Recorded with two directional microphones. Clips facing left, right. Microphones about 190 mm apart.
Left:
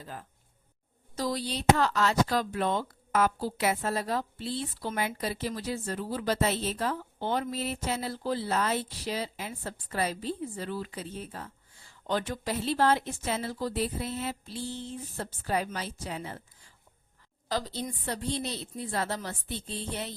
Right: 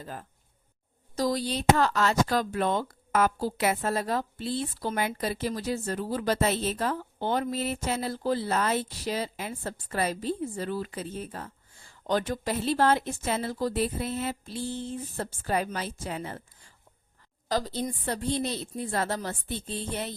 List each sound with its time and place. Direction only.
0.0 s speech: 45° right (ahead or behind)
17.5 s speech: 45° right (ahead or behind)